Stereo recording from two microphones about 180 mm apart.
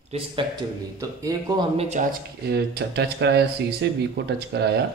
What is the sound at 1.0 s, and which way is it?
Speech, 20° right (ahead or behind).